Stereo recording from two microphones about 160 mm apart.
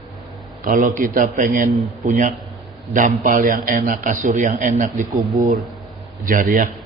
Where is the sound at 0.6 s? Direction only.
55° right (ahead or behind).